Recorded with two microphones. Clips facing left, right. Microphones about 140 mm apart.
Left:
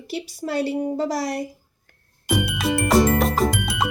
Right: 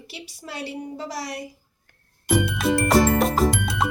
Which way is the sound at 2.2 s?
5° left (ahead or behind).